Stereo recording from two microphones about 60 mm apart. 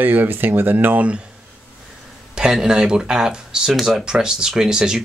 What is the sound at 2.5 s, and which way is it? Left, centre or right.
Speech, centre.